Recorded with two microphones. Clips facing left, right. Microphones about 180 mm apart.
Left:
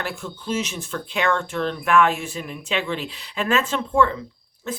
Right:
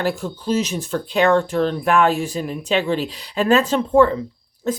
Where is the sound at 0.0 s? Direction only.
35° right (ahead or behind).